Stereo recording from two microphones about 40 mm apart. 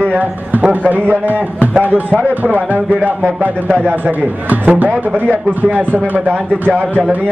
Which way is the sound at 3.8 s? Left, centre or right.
Right.